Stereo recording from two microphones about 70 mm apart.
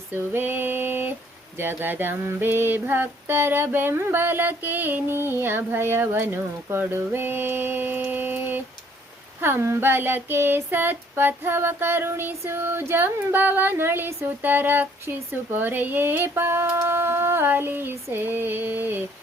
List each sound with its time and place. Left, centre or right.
0.1 s female singing: right
1.5 s child singing: right
16.8 s female singing: right